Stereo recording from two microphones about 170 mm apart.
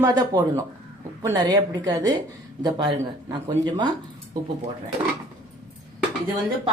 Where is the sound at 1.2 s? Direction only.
20° right (ahead or behind).